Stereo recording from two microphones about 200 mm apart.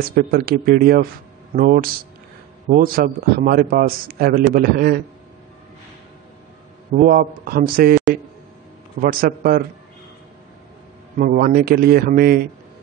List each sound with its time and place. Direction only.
0.0 s a man's voice: 50° right (ahead or behind)
6.9 s a man's voice: 45° right (ahead or behind)
9.0 s a man's voice: 45° right (ahead or behind)
11.1 s a man's voice: 45° right (ahead or behind)